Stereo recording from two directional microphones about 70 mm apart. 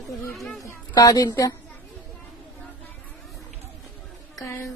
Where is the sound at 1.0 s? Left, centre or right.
Left.